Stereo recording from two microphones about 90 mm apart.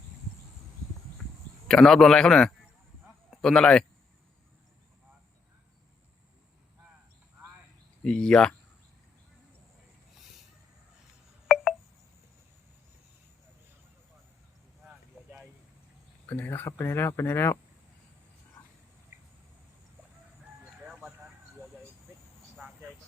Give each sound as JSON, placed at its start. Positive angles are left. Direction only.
{"t": 1.6, "sound": "a man's voice", "side_deg": 5}
{"t": 8.0, "sound": "a man's voice", "side_deg": 10}
{"t": 11.4, "sound": "telephone dialing", "side_deg": 0}
{"t": 16.2, "sound": "speech", "side_deg": 20}